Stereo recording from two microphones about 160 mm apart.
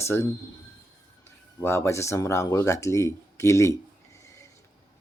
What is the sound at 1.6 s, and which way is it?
Speech, 15° left (ahead or behind).